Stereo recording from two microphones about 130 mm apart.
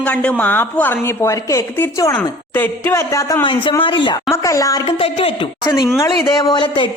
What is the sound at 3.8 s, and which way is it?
Speech, 40° left (ahead or behind).